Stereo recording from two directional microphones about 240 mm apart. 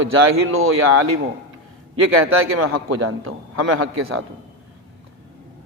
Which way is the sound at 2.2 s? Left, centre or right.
Right.